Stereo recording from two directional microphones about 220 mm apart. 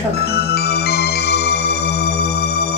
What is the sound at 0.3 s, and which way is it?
Music, 45° left (ahead or behind).